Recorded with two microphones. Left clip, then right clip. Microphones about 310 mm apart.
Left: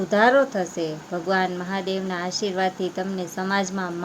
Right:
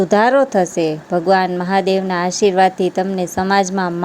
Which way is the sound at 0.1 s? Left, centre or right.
Right.